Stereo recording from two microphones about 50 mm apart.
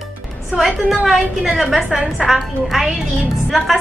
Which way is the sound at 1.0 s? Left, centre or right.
Centre.